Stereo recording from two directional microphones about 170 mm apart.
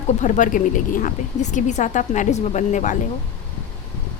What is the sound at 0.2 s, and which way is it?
Speech, 50° left (ahead or behind).